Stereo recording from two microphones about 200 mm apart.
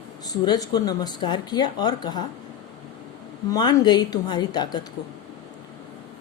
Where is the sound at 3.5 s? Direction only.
20° left (ahead or behind).